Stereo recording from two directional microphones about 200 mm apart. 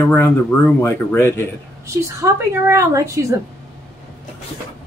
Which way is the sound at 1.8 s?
15° right (ahead or behind).